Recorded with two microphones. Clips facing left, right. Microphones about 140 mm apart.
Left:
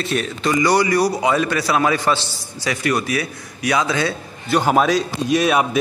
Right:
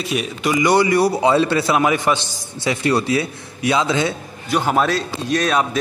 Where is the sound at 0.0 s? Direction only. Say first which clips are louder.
Even; 5° right (ahead or behind); by 4.1 s 20° right (ahead or behind).